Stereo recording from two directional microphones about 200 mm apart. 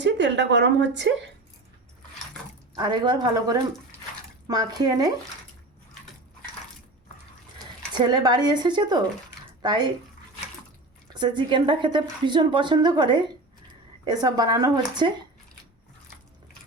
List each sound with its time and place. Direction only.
0.0 s a woman's voice: 60° right (ahead or behind)
2.7 s speech: 20° right (ahead or behind)
7.9 s speech: 20° right (ahead or behind)
11.1 s speech: 20° right (ahead or behind)